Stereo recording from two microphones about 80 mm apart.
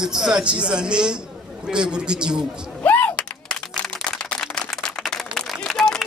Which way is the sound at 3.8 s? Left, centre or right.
Centre.